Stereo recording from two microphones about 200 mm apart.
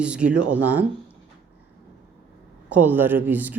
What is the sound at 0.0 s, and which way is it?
Speech, 5° right (ahead or behind).